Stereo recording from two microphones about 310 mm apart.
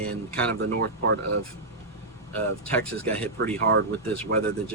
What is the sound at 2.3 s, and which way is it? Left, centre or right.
Speech, centre.